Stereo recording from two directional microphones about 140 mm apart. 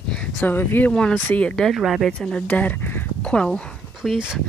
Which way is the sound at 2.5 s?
10° left (ahead or behind).